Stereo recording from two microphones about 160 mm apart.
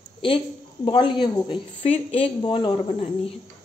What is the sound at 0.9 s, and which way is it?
A woman's voice, 30° left (ahead or behind).